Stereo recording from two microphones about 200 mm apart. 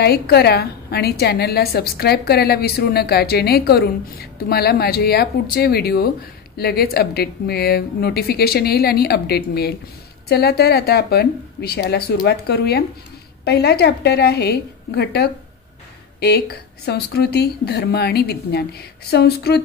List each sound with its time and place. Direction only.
0.0 s a woman's voice: 55° left (ahead or behind)